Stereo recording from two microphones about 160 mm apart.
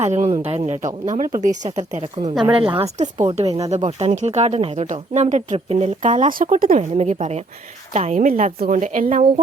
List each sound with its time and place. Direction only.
0.0 s speech: 45° right (ahead or behind)
2.4 s a woman's voice: 30° right (ahead or behind); by 9.2 s 55° right (ahead or behind)